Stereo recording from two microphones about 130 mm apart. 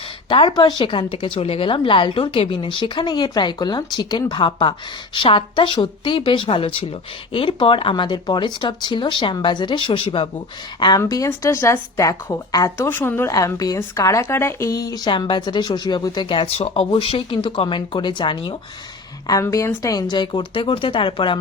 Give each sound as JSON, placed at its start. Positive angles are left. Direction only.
{"t": 0.3, "sound": "speech", "side_deg": 45}
{"t": 11.0, "sound": "a woman's voice", "side_deg": 25}
{"t": 19.3, "sound": "speech", "side_deg": 25}